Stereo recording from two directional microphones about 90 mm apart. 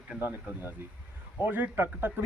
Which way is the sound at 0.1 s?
25° left (ahead or behind).